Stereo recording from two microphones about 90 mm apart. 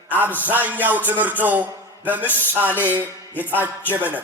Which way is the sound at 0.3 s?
20° right (ahead or behind).